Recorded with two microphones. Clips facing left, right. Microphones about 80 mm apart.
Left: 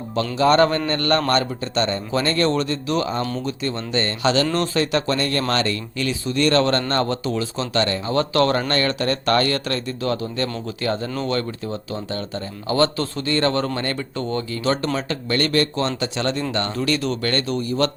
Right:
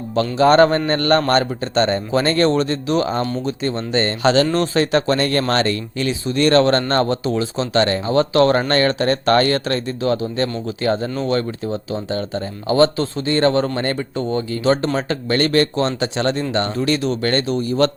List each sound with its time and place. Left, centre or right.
0.2 s a man's voice: right